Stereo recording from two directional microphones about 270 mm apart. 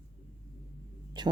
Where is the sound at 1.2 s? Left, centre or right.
Centre.